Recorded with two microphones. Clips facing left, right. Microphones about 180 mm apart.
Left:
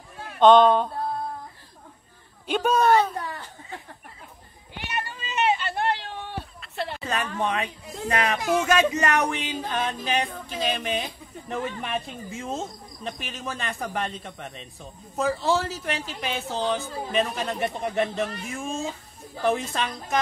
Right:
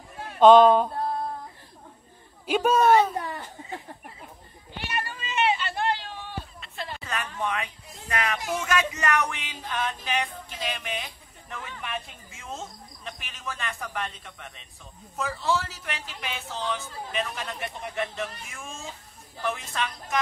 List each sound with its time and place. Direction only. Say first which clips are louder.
0.4 s a man's voice: right 1 dB; 5° right (ahead or behind)
2.4 s a man's voice: even; 5° right (ahead or behind)
3.2 s a sound: right 1 dB; 20° right (ahead or behind)
4.7 s cat: even; 20° left (ahead or behind)
5.2 s a sound: left 2 dB; 40° left (ahead or behind); by 6.4 s 60° left (ahead or behind)
7.3 s speech: left 4 dB; 30° left (ahead or behind)
8.4 s speech: left 7 dB; 90° left
8.6 s speech: left 5 dB; 30° left (ahead or behind)